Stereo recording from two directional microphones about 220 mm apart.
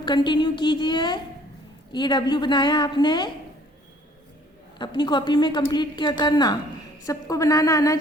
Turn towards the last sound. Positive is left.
turn(degrees=15)  # may be behind; listen again after turning